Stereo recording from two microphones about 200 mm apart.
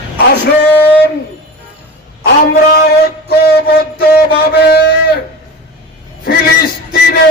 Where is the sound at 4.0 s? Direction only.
55° left (ahead or behind).